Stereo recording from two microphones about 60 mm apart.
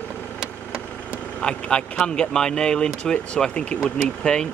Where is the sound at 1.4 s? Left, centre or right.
Centre.